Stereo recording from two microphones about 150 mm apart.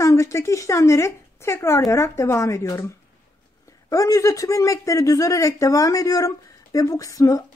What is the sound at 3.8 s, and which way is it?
Speech, 25° left (ahead or behind).